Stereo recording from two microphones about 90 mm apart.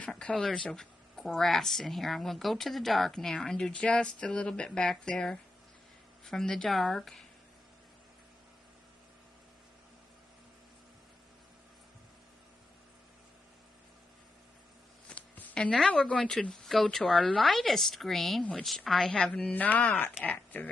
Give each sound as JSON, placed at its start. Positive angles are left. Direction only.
{"t": 0.0, "sound": "speech", "side_deg": 10}
{"t": 15.0, "sound": "speech", "side_deg": 15}